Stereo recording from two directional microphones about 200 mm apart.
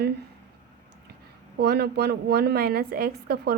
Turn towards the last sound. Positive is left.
turn(degrees=-50)  # may be behind; listen again after turning